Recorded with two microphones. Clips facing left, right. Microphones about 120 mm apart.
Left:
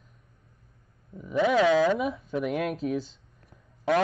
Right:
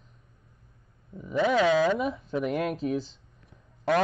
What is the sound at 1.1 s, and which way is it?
Speech, centre (ahead or behind).